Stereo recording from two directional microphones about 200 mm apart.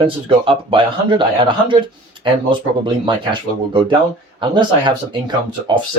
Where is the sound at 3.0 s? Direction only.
25° right (ahead or behind).